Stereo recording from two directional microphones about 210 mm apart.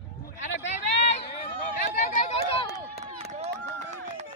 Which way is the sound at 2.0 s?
35° left (ahead or behind).